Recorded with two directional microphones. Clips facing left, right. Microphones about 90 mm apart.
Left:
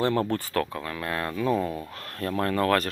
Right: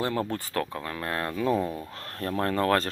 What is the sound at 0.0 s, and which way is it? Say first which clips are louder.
Speech: left 4 dB; 10° right (ahead or behind).